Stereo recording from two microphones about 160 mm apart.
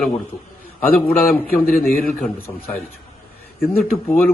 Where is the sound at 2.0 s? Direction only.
5° left (ahead or behind).